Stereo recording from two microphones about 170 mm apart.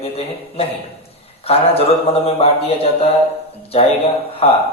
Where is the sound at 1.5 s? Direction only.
35° left (ahead or behind).